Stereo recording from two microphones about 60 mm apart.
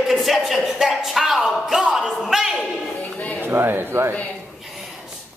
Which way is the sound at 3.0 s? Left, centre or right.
Left.